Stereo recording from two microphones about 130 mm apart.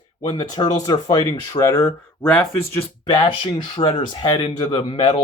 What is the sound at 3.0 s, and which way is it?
Speech, 35° left (ahead or behind).